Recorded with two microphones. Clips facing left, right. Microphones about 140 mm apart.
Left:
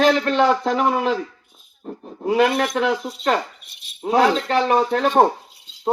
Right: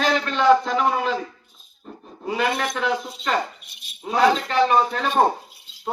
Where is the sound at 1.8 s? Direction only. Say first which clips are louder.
Left 7 dB; 65° left (ahead or behind).